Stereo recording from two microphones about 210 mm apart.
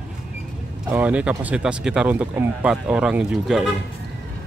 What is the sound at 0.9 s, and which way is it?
Speech, 5° right (ahead or behind).